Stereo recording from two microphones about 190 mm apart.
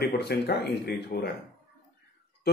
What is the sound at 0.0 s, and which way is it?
Speech, 55° left (ahead or behind).